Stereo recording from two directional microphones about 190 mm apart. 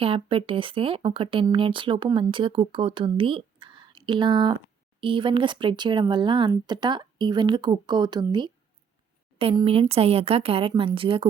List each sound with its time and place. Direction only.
0.0 s speech: 30° right (ahead or behind)